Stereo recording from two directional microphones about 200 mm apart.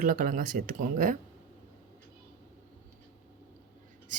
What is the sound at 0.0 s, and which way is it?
Speech, 45° right (ahead or behind).